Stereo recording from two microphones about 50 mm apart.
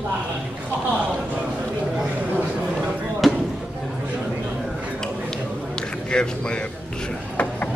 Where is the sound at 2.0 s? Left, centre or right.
Right.